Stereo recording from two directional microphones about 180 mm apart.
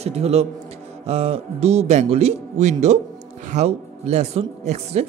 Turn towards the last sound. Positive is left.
turn(degrees=-35)  # may be behind; listen again after turning